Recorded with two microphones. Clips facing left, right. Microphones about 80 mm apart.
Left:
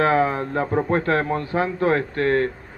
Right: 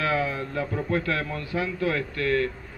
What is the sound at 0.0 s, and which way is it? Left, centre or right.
A man's voice, left.